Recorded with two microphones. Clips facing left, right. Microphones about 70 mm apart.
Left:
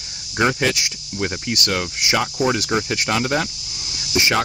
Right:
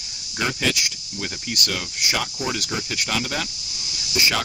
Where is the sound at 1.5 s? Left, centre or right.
Left.